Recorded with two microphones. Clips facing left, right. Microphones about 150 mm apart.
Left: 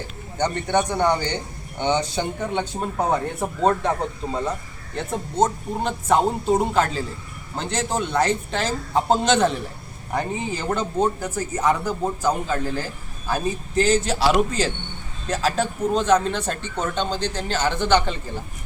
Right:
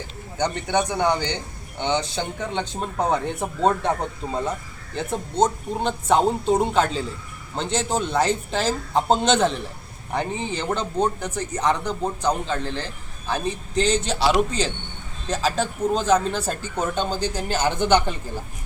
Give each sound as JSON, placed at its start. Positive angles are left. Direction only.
{"t": 0.5, "sound": "speech", "side_deg": -10}
{"t": 1.1, "sound": "a man's voice", "side_deg": 10}